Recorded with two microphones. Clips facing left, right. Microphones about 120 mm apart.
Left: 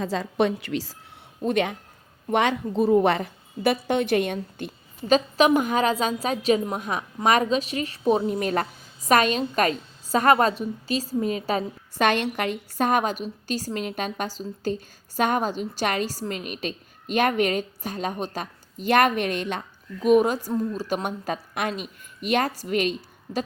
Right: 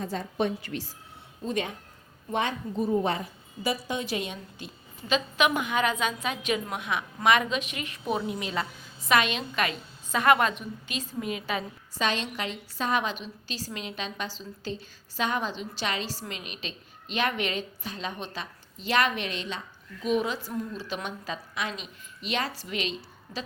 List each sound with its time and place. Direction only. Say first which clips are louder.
0.0 s a woman's voice: left 5 dB; 90° left
1.5 s a woman's voice: left 7 dB; 75° left (ahead or behind); by 8.2 s 35° left (ahead or behind)
8.2 s a woman's voice: left 7 dB; 50° left (ahead or behind)
11.9 s a woman's voice: left 7 dB; 60° left (ahead or behind)